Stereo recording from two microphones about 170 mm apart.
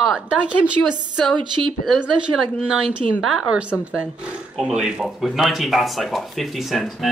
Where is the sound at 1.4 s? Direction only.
25° right (ahead or behind).